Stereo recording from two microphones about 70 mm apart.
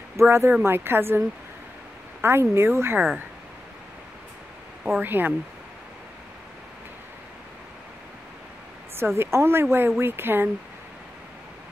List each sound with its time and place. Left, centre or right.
0.2 s speech: right
2.5 s speech: right
4.9 s speech: right
8.9 s speech: right